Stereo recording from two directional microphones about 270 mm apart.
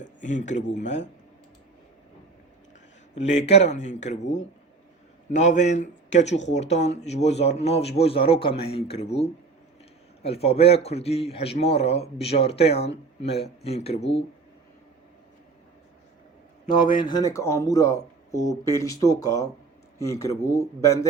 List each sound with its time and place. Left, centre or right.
0.0 s speech: left
3.2 s speech: left
17.0 s speech: centre